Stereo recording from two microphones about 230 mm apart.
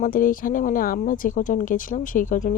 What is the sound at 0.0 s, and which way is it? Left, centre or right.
Speech, left.